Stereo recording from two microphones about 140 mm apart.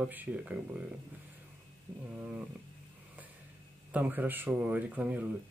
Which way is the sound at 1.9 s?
10° right (ahead or behind).